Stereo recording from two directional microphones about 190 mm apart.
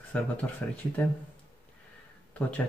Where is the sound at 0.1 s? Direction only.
5° left (ahead or behind).